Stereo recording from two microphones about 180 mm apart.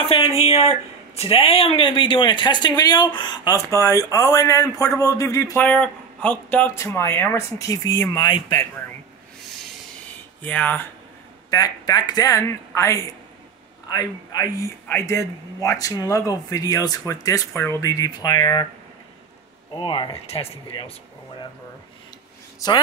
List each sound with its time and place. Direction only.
0.1 s speech: 35° left (ahead or behind)
10.4 s speech: 10° left (ahead or behind)
11.5 s a man's voice: 20° left (ahead or behind)
19.7 s speech: 25° left (ahead or behind)